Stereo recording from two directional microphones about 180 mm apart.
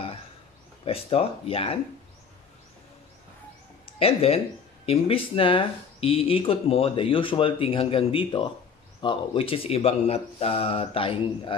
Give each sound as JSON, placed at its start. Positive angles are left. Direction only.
{"t": 0.8, "sound": "speech", "side_deg": 30}
{"t": 3.8, "sound": "speech", "side_deg": 35}